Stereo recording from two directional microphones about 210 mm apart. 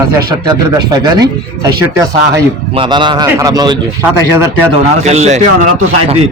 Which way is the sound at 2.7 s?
25° right (ahead or behind).